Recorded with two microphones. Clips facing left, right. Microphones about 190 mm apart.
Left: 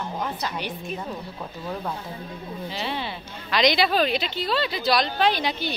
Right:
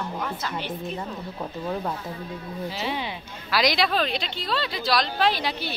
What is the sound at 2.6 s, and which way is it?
A woman's voice, 10° right (ahead or behind).